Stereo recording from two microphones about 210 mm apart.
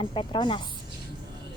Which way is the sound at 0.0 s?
25° left (ahead or behind).